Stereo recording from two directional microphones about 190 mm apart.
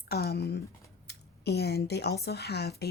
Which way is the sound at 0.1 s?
55° left (ahead or behind).